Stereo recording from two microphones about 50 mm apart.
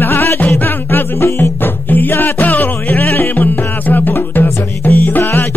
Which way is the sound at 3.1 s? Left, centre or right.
Left.